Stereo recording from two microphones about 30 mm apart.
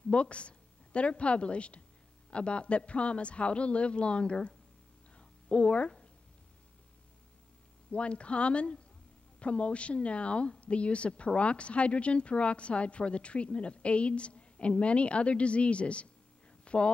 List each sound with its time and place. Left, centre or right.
0.1 s a woman's voice: left
7.9 s a woman's voice: left
16.6 s a sound: left